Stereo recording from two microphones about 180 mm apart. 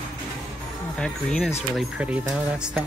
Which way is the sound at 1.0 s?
5° left (ahead or behind).